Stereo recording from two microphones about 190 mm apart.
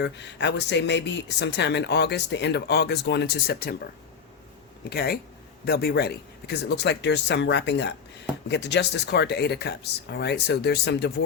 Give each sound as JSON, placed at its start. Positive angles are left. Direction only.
{"t": 0.0, "sound": "speech", "side_deg": 65}
{"t": 4.9, "sound": "speech", "side_deg": 55}